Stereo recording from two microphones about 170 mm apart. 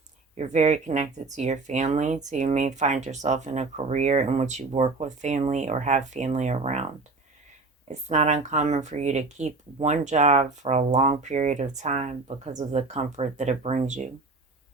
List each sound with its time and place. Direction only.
0.3 s speech: 40° right (ahead or behind)
8.1 s speech: 45° right (ahead or behind)